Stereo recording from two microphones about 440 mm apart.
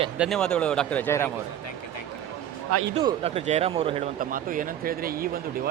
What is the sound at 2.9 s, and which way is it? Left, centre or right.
Speech, centre.